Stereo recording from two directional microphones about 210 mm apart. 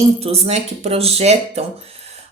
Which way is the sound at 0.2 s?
30° right (ahead or behind).